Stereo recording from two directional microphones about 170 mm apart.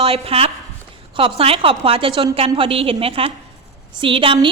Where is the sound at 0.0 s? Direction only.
35° right (ahead or behind).